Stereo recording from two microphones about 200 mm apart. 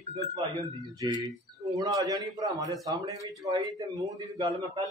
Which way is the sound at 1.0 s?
20° right (ahead or behind).